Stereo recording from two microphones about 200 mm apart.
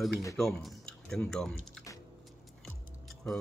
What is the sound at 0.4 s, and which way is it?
Speech, centre (ahead or behind).